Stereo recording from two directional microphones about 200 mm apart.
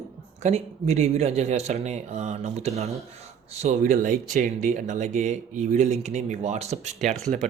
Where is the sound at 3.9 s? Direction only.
45° right (ahead or behind).